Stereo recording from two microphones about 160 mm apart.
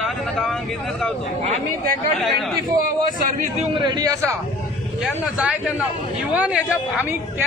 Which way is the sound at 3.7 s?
30° right (ahead or behind).